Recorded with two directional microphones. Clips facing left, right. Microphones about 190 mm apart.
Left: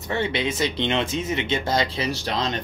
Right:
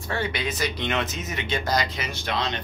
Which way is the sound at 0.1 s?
25° left (ahead or behind).